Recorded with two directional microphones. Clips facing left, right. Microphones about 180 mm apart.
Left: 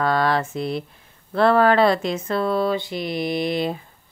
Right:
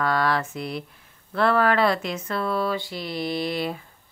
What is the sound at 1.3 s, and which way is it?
Mantra, 30° left (ahead or behind).